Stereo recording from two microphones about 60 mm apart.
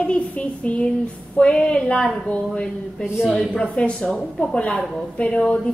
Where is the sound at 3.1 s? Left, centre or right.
Centre.